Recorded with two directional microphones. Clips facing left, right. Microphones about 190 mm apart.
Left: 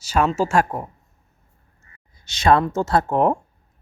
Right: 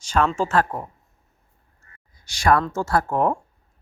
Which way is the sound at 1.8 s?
20° left (ahead or behind).